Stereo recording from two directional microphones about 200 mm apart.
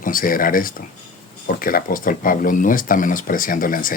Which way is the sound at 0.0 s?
45° left (ahead or behind).